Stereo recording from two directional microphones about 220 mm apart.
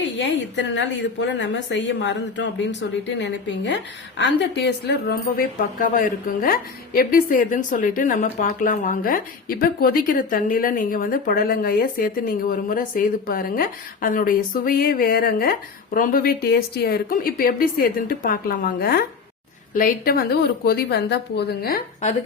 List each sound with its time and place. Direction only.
0.2 s a woman's voice: 55° left (ahead or behind)